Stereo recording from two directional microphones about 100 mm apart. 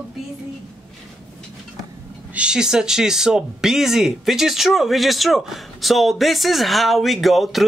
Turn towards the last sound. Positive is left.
turn(degrees=0)  # may be behind; listen again after turning